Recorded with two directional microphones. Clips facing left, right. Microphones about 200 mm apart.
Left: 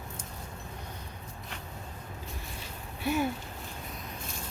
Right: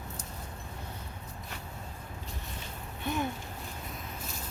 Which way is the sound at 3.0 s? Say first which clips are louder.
Left 4 dB; 5° left (ahead or behind).